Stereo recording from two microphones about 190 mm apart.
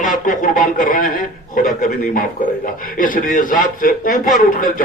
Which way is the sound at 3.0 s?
45° left (ahead or behind).